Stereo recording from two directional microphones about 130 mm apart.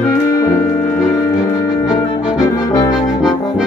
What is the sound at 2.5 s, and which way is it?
Brass instrument, 30° left (ahead or behind).